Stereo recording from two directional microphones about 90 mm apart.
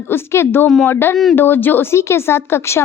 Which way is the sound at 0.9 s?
25° left (ahead or behind).